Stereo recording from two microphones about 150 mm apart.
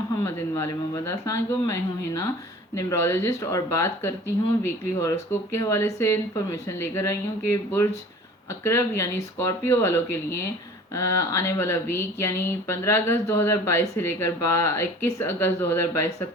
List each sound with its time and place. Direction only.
0.3 s speech: 15° left (ahead or behind)